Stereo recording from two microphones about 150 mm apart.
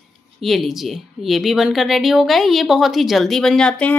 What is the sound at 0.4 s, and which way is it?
Speech, centre (ahead or behind).